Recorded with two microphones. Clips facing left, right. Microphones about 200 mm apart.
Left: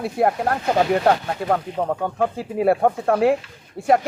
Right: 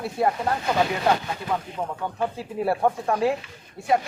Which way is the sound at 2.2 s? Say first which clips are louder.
Left 2 dB; 60° left (ahead or behind).